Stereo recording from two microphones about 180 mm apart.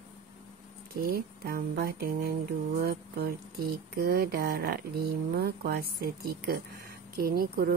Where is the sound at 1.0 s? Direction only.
55° right (ahead or behind).